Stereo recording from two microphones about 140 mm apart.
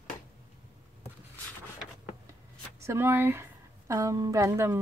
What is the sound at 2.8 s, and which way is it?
Speech, 15° right (ahead or behind).